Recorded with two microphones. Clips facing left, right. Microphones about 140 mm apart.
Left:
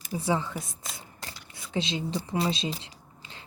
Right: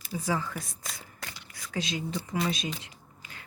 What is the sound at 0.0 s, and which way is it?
Speech, 20° left (ahead or behind).